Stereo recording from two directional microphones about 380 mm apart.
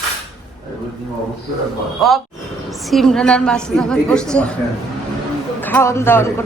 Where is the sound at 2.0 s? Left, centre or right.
Centre.